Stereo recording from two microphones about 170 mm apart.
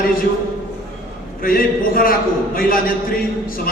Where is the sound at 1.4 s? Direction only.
60° left (ahead or behind).